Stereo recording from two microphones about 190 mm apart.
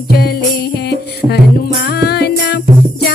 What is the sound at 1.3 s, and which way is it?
Music, 55° left (ahead or behind).